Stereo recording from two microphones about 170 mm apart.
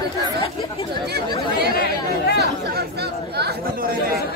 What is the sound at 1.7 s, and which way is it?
Chatter, 65° left (ahead or behind).